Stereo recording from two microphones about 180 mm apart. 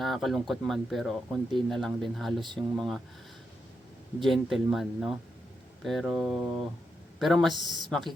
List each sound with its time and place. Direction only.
0.0 s speech: centre (ahead or behind)
4.2 s speech: centre (ahead or behind)